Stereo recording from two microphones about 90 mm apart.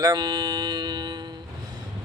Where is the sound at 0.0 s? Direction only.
50° right (ahead or behind).